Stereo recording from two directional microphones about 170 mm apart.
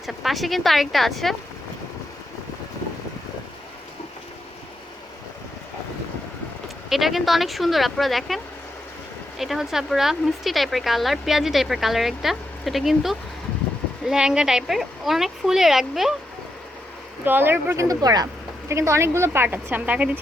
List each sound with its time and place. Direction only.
0.0 s speech: centre (ahead or behind)
6.9 s speech: centre (ahead or behind)
9.4 s speech: centre (ahead or behind)
17.2 s a woman's voice: 10° right (ahead or behind)